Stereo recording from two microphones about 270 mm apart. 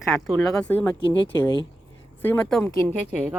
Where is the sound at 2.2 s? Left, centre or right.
Centre.